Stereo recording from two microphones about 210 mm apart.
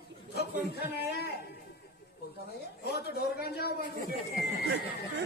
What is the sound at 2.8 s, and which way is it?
Speech, 50° left (ahead or behind).